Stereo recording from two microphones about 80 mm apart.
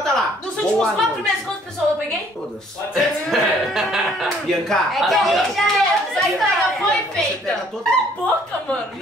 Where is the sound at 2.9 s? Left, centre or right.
Centre.